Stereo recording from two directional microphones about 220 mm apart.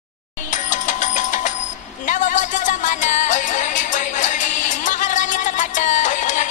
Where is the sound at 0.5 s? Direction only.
35° left (ahead or behind).